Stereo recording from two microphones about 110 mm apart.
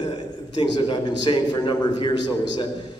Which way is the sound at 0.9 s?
45° left (ahead or behind).